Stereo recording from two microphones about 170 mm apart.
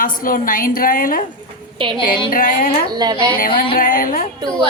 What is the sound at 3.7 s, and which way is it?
Speech, 55° left (ahead or behind).